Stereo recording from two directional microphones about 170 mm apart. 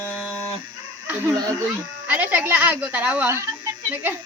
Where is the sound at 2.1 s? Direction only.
10° right (ahead or behind).